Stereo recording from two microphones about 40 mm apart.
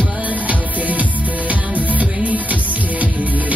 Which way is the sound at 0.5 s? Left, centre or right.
Right.